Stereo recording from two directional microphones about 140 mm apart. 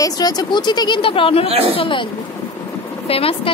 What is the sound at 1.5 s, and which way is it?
Speech, 45° right (ahead or behind).